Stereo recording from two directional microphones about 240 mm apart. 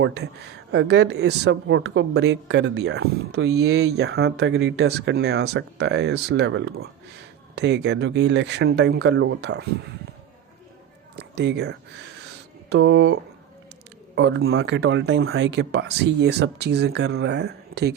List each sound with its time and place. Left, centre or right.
0.0 s speech: right
11.2 s speech: right
14.2 s speech: right